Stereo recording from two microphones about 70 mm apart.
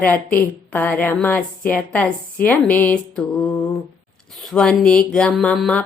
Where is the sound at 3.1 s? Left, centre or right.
Centre.